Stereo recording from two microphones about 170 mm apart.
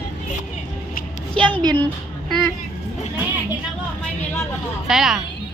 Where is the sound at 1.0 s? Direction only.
55° left (ahead or behind).